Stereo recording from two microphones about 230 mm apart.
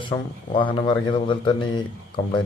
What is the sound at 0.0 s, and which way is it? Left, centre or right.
A man's voice, left.